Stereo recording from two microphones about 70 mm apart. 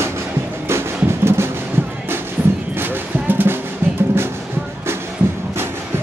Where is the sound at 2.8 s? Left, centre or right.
Right.